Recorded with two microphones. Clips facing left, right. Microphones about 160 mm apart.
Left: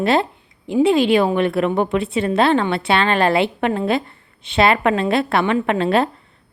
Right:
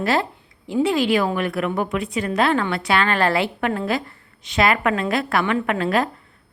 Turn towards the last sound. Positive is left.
turn(degrees=25)  # may be behind; listen again after turning